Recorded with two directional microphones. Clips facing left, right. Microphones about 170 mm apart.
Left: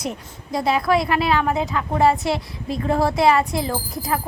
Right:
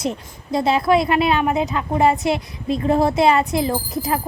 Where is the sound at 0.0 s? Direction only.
25° right (ahead or behind).